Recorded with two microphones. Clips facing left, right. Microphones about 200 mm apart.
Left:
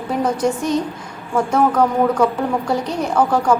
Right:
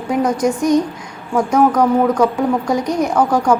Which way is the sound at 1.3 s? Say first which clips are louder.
Right 3 dB; 15° right (ahead or behind).